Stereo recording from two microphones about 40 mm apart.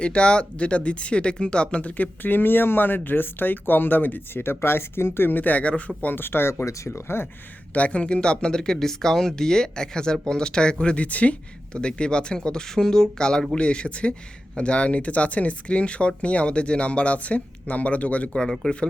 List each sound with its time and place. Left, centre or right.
0.0 s speech: left
1.8 s speech: left
4.4 s speech: left
5.3 s speech: left
6.1 s speech: left
7.1 s speech: left
7.7 s speech: left
10.9 s speech: left
11.7 s speech: left
18.4 s speech: centre